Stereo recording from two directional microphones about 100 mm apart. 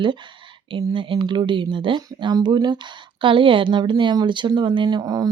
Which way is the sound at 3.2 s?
55° right (ahead or behind).